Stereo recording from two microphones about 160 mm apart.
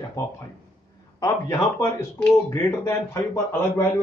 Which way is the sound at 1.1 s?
20° left (ahead or behind).